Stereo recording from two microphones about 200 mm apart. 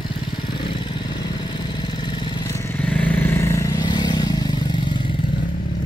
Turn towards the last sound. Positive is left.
turn(degrees=20)  # may be behind; listen again after turning